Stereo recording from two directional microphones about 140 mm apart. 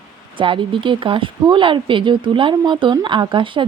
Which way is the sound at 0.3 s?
35° right (ahead or behind).